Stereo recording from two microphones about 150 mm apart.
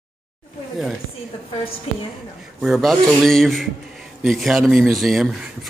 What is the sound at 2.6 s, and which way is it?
A man's voice, centre (ahead or behind).